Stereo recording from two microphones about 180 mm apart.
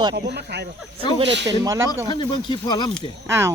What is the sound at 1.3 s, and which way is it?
Speech, 75° right (ahead or behind).